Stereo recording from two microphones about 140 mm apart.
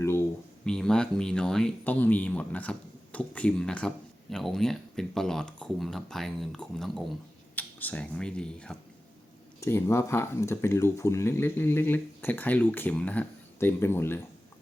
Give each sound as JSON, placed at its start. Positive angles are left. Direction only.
{"t": 0.0, "sound": "a sound", "side_deg": 20}
{"t": 0.6, "sound": "speech", "side_deg": 5}
{"t": 9.6, "sound": "speech", "side_deg": 15}